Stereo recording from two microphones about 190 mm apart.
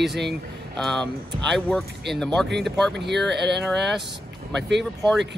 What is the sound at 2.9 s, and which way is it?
Speech, 65° right (ahead or behind).